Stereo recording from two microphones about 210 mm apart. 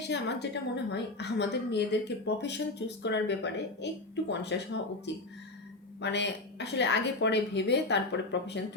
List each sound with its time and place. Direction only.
0.1 s a woman's voice: 55° left (ahead or behind)